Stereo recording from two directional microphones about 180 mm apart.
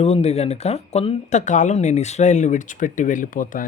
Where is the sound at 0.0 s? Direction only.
35° left (ahead or behind).